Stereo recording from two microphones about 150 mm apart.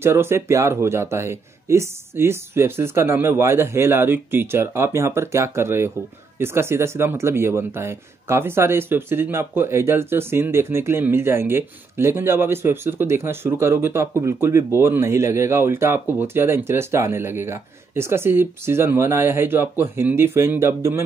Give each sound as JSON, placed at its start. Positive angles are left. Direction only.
{"t": 0.0, "sound": "speech", "side_deg": -15}